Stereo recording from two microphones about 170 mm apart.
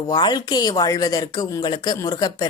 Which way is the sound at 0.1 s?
25° left (ahead or behind).